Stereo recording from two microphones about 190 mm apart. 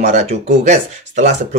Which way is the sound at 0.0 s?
35° right (ahead or behind).